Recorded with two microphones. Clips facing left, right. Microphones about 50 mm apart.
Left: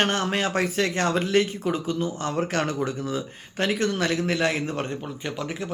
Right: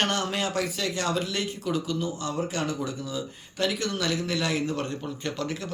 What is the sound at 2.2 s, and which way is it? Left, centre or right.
Speech, left.